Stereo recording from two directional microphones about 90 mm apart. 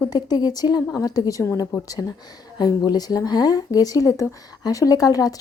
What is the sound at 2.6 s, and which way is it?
A woman's voice, 50° left (ahead or behind).